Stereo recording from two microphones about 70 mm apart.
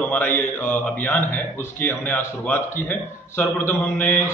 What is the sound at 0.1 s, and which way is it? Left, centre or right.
A man's voice, left.